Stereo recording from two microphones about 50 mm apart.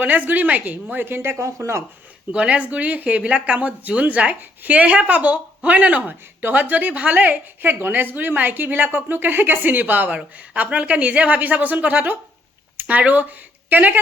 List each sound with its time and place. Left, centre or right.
0.0 s speech: right
1.4 s speech: right
2.3 s speech: right
10.3 s speech: right